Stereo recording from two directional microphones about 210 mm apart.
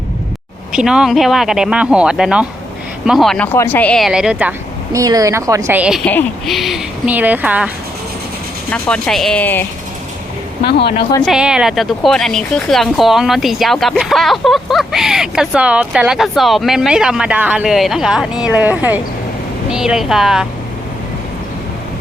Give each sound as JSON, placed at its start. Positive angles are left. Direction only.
{"t": 0.7, "sound": "speech", "side_deg": -5}
{"t": 8.7, "sound": "speech", "side_deg": 5}
{"t": 10.6, "sound": "speech", "side_deg": 55}
{"t": 11.3, "sound": "speech", "side_deg": -5}